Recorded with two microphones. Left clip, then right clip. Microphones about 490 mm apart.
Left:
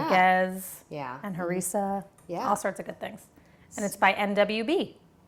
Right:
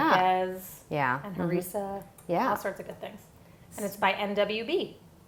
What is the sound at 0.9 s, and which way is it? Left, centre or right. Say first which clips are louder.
Speech: right 9 dB; right.